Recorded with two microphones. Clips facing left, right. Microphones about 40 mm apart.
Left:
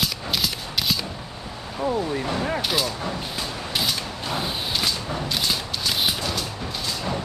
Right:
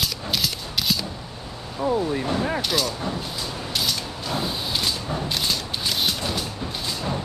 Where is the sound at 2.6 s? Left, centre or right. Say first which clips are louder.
Even; centre.